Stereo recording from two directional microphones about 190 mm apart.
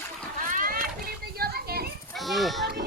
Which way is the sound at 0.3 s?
45° right (ahead or behind).